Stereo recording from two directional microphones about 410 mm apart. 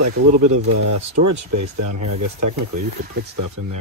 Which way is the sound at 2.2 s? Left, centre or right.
Right.